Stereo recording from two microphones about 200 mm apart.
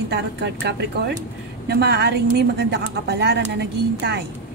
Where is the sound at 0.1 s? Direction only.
55° right (ahead or behind).